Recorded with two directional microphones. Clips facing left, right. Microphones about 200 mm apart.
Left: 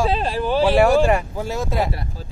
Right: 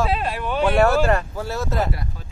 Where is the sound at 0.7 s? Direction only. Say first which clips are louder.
Left 1 dB; 10° left (ahead or behind).